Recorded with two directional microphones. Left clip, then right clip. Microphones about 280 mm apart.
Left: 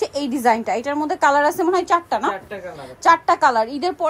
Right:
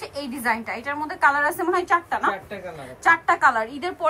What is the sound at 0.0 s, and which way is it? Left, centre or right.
A woman's voice, left.